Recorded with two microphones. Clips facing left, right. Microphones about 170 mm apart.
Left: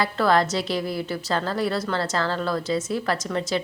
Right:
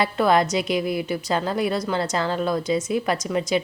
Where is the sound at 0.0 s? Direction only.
20° right (ahead or behind).